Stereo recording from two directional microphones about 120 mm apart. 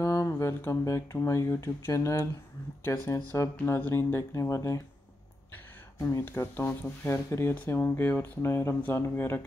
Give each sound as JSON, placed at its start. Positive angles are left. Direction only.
{"t": 0.0, "sound": "speech", "side_deg": 25}
{"t": 5.9, "sound": "speech", "side_deg": 25}